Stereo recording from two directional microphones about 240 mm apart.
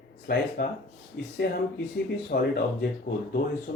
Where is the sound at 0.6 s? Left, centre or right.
Left.